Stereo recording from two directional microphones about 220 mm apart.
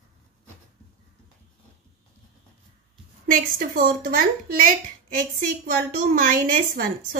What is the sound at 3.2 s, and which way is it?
A woman's voice, 40° right (ahead or behind).